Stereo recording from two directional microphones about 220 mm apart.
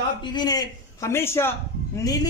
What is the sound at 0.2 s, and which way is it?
A woman's voice, 20° left (ahead or behind).